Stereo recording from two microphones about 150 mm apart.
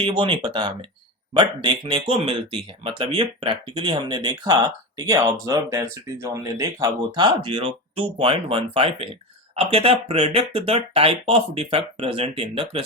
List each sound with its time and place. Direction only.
0.0 s speech: 35° right (ahead or behind)